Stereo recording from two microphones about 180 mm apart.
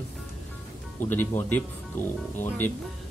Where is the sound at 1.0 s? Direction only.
10° left (ahead or behind).